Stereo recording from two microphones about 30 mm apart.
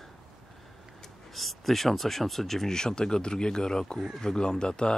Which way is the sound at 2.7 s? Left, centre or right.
Left.